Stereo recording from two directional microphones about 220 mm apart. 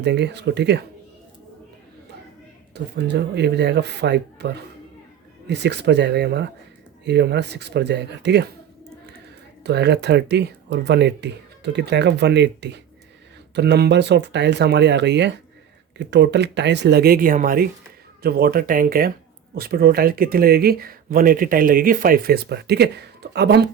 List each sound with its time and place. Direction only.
0.0 s speech: 50° right (ahead or behind)
2.7 s speech: 50° right (ahead or behind)
9.6 s speech: 50° right (ahead or behind)